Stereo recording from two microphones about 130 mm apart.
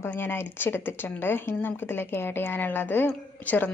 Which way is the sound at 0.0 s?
15° left (ahead or behind).